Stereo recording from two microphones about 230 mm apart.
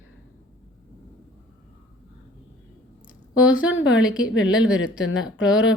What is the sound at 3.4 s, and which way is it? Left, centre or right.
Speech, centre.